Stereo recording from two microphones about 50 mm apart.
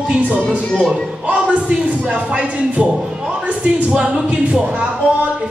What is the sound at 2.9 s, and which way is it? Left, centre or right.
Speech, centre.